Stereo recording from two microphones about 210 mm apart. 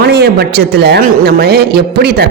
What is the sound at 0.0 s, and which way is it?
Speech, 50° right (ahead or behind).